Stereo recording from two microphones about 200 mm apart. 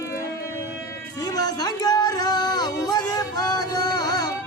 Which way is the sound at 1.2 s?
20° left (ahead or behind).